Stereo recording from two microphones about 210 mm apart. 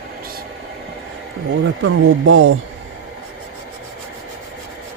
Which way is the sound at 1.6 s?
70° right (ahead or behind).